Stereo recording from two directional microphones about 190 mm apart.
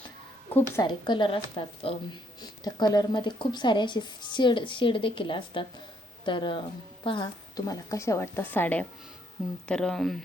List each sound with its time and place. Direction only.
0.5 s speech: 20° left (ahead or behind); by 10.2 s centre (ahead or behind)